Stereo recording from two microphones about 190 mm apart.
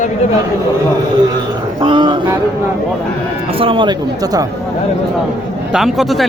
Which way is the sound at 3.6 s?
25° right (ahead or behind).